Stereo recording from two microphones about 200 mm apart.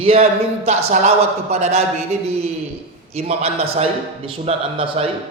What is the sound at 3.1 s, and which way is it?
A man's voice, 30° right (ahead or behind).